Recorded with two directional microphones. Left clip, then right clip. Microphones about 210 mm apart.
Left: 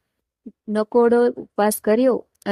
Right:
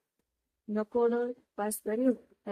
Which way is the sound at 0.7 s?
45° left (ahead or behind).